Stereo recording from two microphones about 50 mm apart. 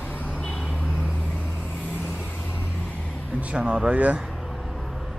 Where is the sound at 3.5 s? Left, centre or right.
Right.